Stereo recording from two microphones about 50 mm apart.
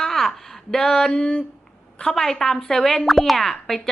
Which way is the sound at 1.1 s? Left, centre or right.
Left.